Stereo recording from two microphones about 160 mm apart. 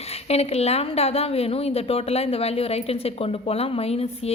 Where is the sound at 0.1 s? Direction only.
40° left (ahead or behind).